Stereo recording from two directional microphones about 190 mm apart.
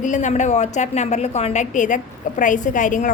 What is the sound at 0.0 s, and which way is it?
A woman's voice, 40° left (ahead or behind).